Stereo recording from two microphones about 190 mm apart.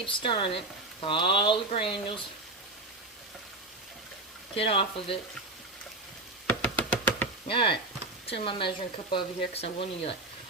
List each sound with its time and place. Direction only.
0.0 s speech: 25° left (ahead or behind)
4.5 s speech: 30° left (ahead or behind)
6.5 s a sound: 10° left (ahead or behind)
7.4 s speech: 25° left (ahead or behind)